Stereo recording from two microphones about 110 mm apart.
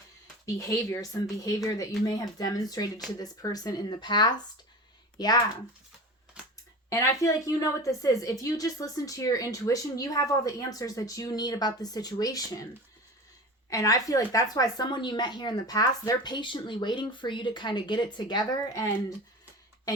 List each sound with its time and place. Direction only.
0.4 s a woman's voice: 30° left (ahead or behind)
6.9 s a woman's voice: 30° left (ahead or behind)
13.7 s a woman's voice: 30° left (ahead or behind)